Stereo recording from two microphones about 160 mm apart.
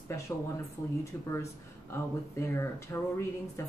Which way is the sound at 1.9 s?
15° left (ahead or behind).